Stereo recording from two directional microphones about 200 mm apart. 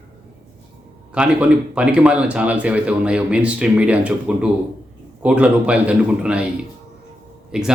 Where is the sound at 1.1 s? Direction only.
5° right (ahead or behind).